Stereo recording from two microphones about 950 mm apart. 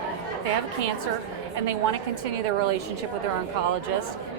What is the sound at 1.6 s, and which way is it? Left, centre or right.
A woman's voice, right.